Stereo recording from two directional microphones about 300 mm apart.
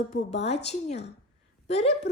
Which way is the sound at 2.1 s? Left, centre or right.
Left.